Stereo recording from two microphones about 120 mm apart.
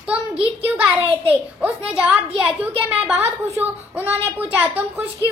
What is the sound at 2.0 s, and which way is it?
A child's voice, 10° right (ahead or behind).